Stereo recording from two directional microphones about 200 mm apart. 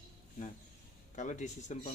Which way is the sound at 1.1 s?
40° left (ahead or behind).